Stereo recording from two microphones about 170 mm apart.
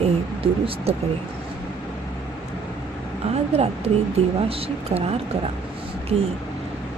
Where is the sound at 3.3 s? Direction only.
35° right (ahead or behind).